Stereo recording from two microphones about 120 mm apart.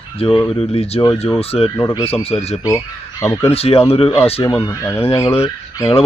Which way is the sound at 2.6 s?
25° left (ahead or behind).